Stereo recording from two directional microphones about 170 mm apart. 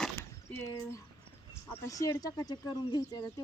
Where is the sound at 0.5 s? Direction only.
15° left (ahead or behind).